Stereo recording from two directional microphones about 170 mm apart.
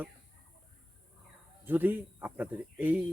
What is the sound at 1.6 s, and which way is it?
Speech, 10° right (ahead or behind).